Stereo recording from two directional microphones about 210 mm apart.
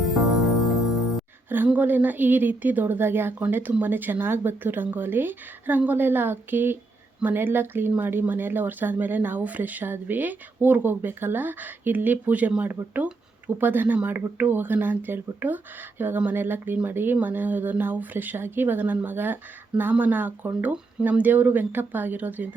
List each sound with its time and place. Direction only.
1.5 s speech: 10° right (ahead or behind)